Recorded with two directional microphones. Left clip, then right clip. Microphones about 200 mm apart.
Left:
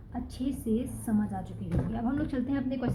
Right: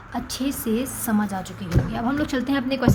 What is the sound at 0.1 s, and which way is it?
A woman's voice, 25° right (ahead or behind).